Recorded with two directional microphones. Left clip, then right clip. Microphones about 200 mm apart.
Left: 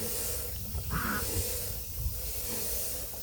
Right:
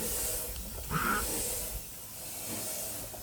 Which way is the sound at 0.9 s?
35° right (ahead or behind).